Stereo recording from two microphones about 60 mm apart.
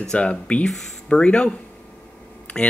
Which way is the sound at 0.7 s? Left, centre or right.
Centre.